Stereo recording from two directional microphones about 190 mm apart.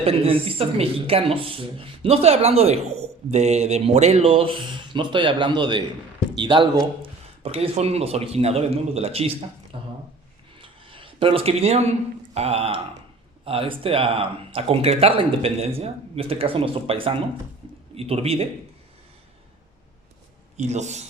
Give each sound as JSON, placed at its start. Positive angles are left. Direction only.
{"t": 0.0, "sound": "a man's voice", "side_deg": -30}
{"t": 20.6, "sound": "speech", "side_deg": -35}